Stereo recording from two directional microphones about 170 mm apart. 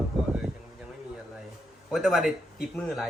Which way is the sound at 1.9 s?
Centre (ahead or behind).